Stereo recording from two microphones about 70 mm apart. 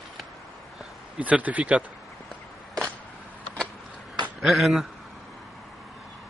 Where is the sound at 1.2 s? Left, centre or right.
Right.